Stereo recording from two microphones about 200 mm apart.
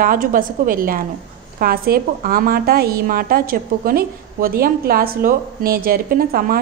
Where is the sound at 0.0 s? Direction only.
45° right (ahead or behind).